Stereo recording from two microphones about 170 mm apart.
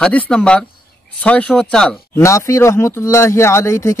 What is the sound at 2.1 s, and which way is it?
Speech, 15° left (ahead or behind).